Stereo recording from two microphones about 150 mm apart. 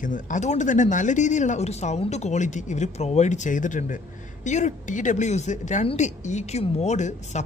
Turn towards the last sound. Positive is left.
turn(degrees=50)  # may be behind; listen again after turning